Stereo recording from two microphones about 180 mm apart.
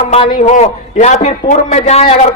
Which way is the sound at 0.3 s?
40° left (ahead or behind).